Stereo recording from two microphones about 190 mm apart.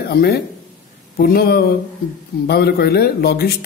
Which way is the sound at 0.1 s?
55° left (ahead or behind).